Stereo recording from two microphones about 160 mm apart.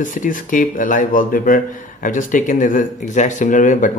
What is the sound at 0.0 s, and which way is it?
Speech, 55° left (ahead or behind).